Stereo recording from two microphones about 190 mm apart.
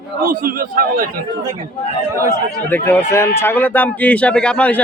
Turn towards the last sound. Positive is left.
turn(degrees=10)  # may be behind; listen again after turning